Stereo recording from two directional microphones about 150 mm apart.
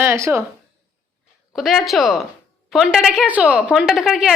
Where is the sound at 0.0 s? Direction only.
20° right (ahead or behind).